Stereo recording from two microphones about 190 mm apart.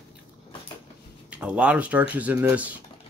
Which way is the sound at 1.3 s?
5° right (ahead or behind).